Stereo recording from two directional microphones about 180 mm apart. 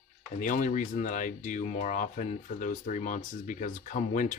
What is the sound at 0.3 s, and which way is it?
Speech, 45° left (ahead or behind).